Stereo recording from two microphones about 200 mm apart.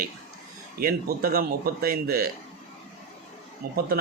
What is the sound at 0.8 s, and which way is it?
Speech, 45° right (ahead or behind).